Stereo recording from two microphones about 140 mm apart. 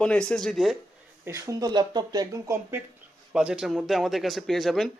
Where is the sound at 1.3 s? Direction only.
20° right (ahead or behind).